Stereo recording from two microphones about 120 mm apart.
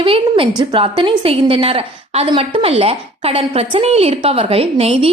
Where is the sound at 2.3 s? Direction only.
45° right (ahead or behind).